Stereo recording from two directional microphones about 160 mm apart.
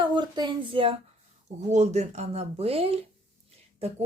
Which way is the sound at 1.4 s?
45° right (ahead or behind).